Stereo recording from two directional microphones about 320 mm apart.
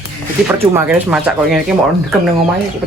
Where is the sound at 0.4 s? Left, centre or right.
Centre.